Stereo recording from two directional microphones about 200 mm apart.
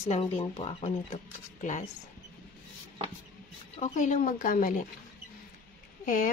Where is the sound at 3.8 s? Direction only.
40° left (ahead or behind).